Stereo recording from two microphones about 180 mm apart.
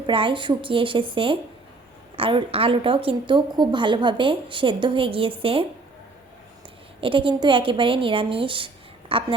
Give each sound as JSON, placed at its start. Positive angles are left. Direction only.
{"t": 0.0, "sound": "a woman's voice", "side_deg": -30}
{"t": 7.0, "sound": "a woman's voice", "side_deg": -30}